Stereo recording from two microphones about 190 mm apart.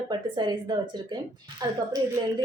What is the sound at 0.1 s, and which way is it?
A woman's voice, 25° right (ahead or behind).